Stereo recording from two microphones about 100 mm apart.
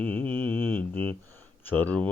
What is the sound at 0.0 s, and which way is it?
Mantra, 20° left (ahead or behind).